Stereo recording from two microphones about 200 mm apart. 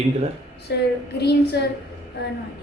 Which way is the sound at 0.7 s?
55° left (ahead or behind).